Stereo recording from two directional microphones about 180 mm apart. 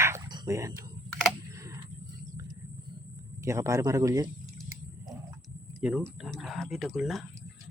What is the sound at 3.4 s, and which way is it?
Speech, 15° right (ahead or behind).